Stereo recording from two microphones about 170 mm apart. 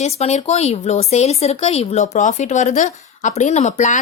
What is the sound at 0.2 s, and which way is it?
A woman's voice, 40° left (ahead or behind).